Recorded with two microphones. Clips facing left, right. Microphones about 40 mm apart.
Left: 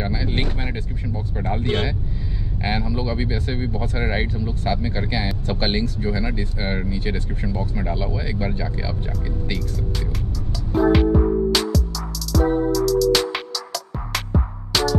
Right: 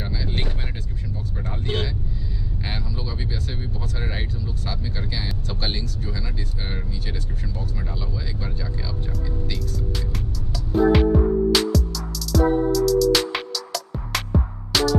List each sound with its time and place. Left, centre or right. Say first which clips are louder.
0.0 s a sound: left 5 dB; centre
1.4 s vehicle: left 5 dB; left
2.6 s speech: left 9 dB; left
10.8 s music: left 1 dB; centre